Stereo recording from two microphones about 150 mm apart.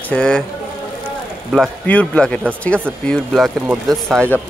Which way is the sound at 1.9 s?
10° left (ahead or behind).